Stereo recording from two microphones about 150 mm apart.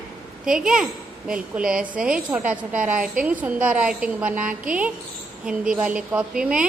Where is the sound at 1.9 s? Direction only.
10° right (ahead or behind).